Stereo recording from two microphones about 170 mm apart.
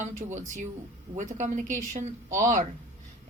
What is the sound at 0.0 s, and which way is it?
Speech, 45° right (ahead or behind).